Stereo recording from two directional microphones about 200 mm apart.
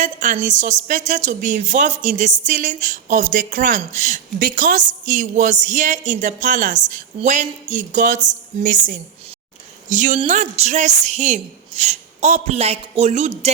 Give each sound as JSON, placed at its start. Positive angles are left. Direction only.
{"t": 0.0, "sound": "speech", "side_deg": -40}